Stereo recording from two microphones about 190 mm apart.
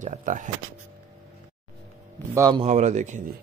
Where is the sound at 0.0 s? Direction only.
45° right (ahead or behind).